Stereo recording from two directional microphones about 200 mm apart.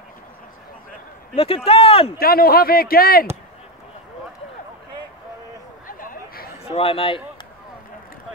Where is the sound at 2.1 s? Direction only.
50° left (ahead or behind).